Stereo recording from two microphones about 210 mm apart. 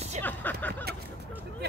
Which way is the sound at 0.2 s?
10° left (ahead or behind).